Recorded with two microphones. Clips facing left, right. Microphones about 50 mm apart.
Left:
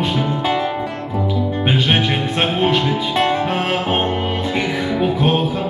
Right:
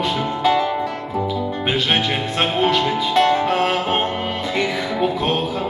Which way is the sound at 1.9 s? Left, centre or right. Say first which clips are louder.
Left 2 dB; left.